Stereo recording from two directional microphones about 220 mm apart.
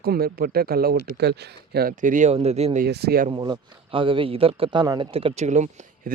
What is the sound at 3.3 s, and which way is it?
Speech, 20° right (ahead or behind).